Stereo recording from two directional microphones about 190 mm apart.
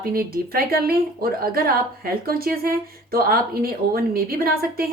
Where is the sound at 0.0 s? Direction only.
50° right (ahead or behind).